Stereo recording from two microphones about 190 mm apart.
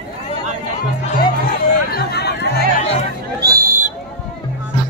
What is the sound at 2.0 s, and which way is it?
Chatter, 60° left (ahead or behind).